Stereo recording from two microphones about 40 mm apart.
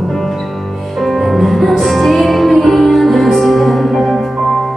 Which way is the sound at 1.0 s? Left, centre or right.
Centre.